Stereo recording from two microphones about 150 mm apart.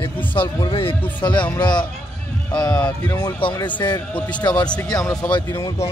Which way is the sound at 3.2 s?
30° left (ahead or behind).